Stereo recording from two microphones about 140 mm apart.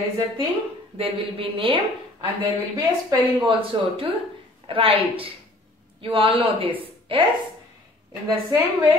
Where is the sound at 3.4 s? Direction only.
40° right (ahead or behind).